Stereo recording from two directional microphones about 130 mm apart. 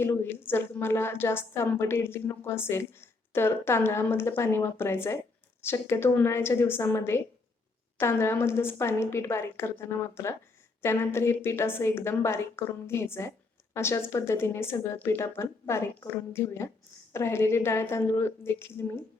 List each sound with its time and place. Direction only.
0.0 s a woman's voice: 15° left (ahead or behind)